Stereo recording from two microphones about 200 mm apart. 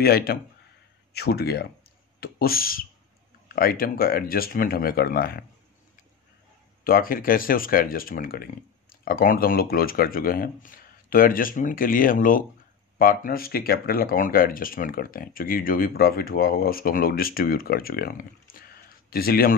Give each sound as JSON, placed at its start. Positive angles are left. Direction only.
{"t": 0.0, "sound": "speech", "side_deg": 50}
{"t": 6.8, "sound": "speech", "side_deg": 45}